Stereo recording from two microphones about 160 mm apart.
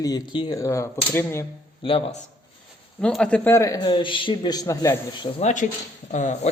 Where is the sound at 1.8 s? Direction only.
35° left (ahead or behind).